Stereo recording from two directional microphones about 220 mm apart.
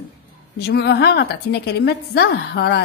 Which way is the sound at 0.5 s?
50° left (ahead or behind).